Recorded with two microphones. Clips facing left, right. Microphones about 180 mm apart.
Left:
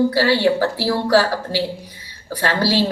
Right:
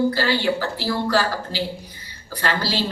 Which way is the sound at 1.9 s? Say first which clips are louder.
Left 5 dB; 70° left (ahead or behind).